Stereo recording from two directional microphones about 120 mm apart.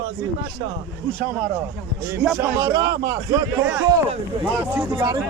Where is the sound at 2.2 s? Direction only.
10° right (ahead or behind).